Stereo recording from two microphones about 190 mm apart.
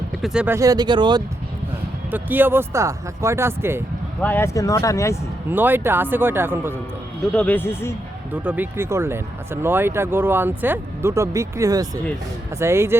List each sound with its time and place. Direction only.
0.2 s speech: 5° right (ahead or behind); by 1.2 s 25° right (ahead or behind)
2.0 s speech: 10° right (ahead or behind)
4.2 s speech: 10° left (ahead or behind)
5.5 s speech: 10° right (ahead or behind)
7.3 s speech: 10° left (ahead or behind)
8.3 s speech: 10° right (ahead or behind)